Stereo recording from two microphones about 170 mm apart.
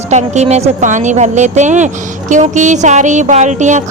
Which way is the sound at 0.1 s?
40° right (ahead or behind).